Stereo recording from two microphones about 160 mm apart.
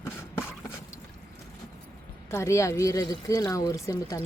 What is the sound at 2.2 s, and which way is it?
Speech, 20° left (ahead or behind).